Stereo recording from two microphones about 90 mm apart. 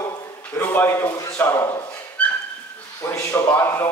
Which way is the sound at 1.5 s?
35° left (ahead or behind).